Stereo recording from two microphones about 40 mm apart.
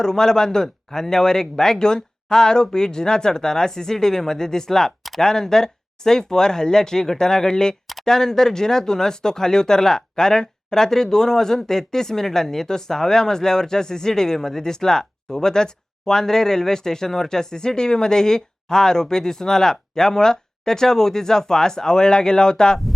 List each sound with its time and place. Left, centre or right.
0.0 s speech: centre